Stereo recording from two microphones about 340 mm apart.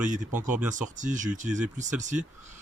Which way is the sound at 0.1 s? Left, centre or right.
Right.